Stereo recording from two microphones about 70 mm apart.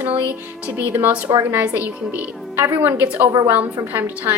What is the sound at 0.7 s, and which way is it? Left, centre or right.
A woman's voice, right.